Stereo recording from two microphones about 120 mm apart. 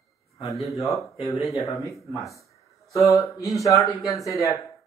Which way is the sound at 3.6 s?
25° left (ahead or behind).